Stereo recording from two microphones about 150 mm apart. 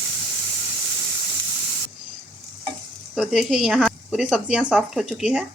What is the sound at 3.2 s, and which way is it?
Speech, 5° right (ahead or behind).